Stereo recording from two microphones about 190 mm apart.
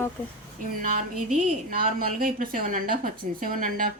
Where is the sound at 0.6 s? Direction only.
45° right (ahead or behind).